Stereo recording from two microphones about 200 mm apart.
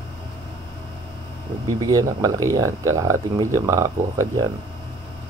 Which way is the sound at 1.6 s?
20° right (ahead or behind).